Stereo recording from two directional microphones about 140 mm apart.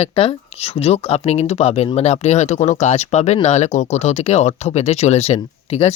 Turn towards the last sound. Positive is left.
turn(degrees=45)  # may be behind; listen again after turning